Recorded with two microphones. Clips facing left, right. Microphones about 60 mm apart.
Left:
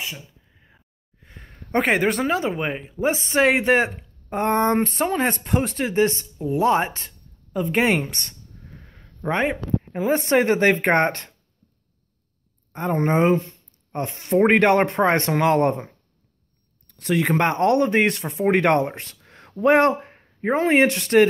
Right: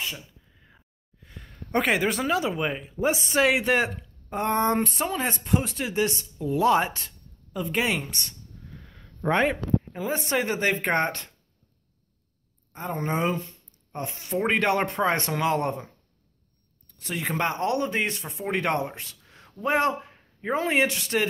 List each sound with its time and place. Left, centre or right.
1.2 s speech: left
8.6 s a sound: left
9.3 s speech: centre
9.8 s speech: left
12.7 s speech: left
16.8 s speech: left